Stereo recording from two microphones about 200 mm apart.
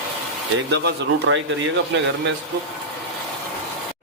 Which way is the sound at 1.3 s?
75° right (ahead or behind).